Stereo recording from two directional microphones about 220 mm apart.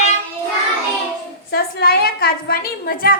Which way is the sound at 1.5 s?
45° left (ahead or behind).